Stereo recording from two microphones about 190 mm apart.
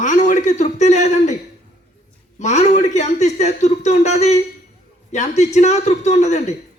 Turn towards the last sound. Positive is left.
turn(degrees=35)  # may be behind; listen again after turning